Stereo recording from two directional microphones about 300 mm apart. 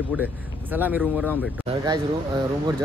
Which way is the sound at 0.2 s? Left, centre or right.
Centre.